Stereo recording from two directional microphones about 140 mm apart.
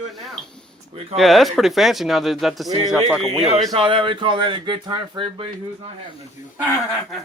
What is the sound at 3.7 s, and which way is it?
Speech, 40° right (ahead or behind).